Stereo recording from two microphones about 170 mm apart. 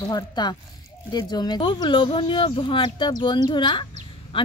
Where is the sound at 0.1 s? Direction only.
25° left (ahead or behind).